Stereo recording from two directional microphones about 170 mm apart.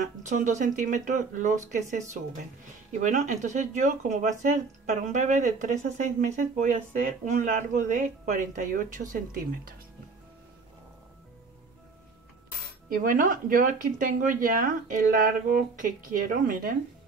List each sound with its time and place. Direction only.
0.0 s speech: 45° right (ahead or behind)
12.9 s speech: 55° right (ahead or behind)